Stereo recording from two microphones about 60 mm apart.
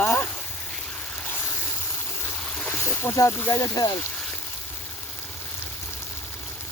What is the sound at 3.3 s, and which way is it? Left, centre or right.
Speech, left.